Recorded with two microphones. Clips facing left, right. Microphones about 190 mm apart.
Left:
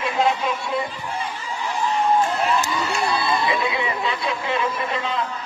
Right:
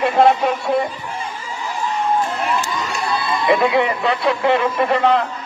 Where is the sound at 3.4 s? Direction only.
65° right (ahead or behind).